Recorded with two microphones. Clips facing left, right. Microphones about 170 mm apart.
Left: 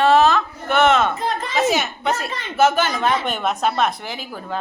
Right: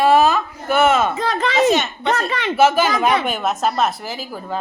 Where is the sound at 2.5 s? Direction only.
5° right (ahead or behind).